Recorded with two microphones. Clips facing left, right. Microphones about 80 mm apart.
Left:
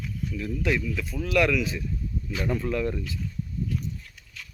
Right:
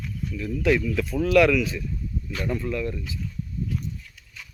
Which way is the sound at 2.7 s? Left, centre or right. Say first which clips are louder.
Left 1 dB; left.